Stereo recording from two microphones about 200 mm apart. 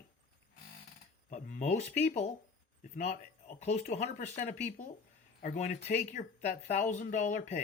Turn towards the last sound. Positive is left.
turn(degrees=40)  # may be behind; listen again after turning